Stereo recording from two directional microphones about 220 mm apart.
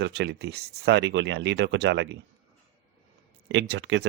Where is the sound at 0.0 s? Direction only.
50° right (ahead or behind).